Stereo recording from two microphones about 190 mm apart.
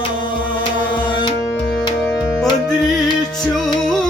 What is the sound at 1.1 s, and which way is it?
Tabla, 25° left (ahead or behind).